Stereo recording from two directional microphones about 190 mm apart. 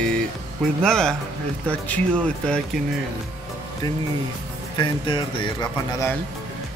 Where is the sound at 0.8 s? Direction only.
5° left (ahead or behind).